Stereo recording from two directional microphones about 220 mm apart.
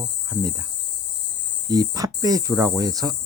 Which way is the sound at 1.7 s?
15° right (ahead or behind).